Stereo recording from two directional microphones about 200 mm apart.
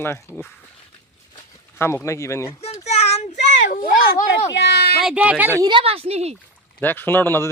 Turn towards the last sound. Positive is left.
turn(degrees=10)  # may be behind; listen again after turning